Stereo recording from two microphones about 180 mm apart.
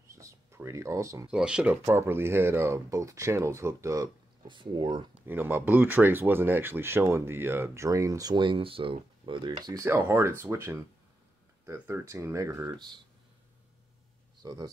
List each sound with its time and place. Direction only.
0.1 s a sound: 15° right (ahead or behind)
1.3 s speech: 5° right (ahead or behind); by 5.0 s 25° right (ahead or behind)
5.2 s speech: 10° right (ahead or behind)
14.4 s speech: 20° right (ahead or behind)